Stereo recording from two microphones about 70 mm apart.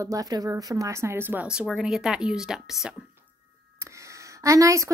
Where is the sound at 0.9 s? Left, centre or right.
Right.